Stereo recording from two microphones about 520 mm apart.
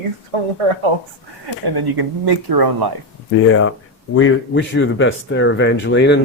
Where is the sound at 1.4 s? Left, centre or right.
Right.